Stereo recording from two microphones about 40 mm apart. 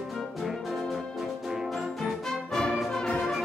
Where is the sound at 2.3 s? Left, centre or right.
Centre.